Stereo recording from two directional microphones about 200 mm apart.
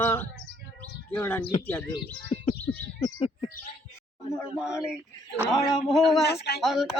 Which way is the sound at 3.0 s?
30° left (ahead or behind).